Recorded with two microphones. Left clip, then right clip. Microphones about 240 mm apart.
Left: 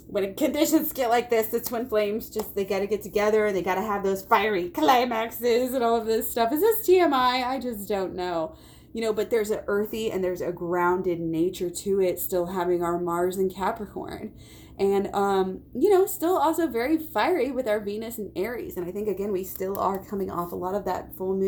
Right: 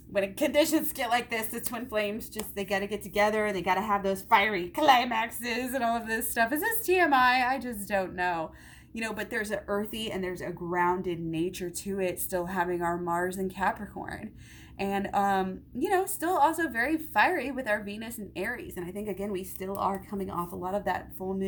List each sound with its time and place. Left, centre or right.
0.1 s a woman's voice: right
3.2 s a woman's voice: right